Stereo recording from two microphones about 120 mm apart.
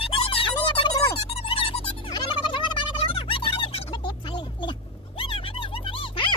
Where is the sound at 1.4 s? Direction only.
50° left (ahead or behind).